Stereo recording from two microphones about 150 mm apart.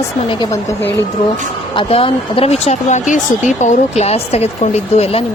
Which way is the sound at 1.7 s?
35° left (ahead or behind).